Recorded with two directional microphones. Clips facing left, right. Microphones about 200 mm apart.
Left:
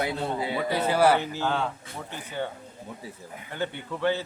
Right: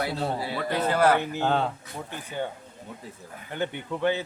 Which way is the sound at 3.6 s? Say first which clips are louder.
Right 1 dB; 15° right (ahead or behind).